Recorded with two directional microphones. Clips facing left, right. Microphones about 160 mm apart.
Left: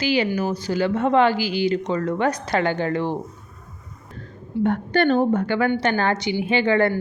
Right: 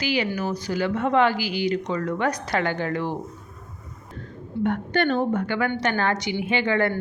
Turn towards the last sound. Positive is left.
turn(degrees=30)  # may be behind; listen again after turning